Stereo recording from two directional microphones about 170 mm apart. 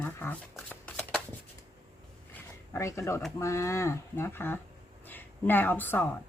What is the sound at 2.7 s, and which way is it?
Speech, 15° left (ahead or behind).